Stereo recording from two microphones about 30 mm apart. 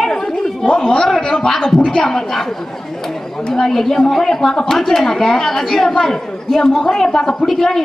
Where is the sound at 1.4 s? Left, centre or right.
Centre.